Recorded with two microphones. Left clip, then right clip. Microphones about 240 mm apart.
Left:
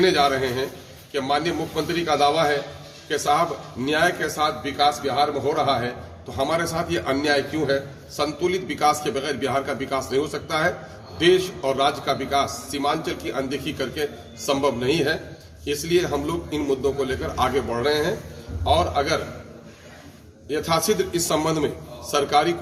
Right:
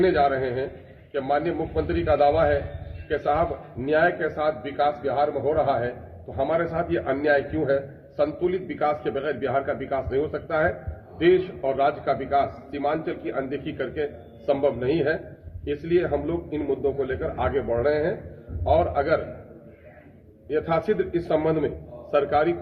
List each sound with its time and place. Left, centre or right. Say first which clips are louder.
0.0 s a man's voice: left 2 dB; centre
3.8 s a man's voice: even; centre
11.8 s a man's voice: even; centre
20.5 s a man's voice: left 2 dB; centre